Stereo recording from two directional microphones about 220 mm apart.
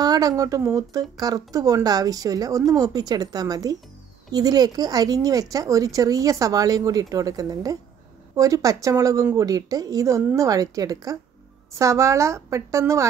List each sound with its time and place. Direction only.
0.0 s speech: 15° right (ahead or behind)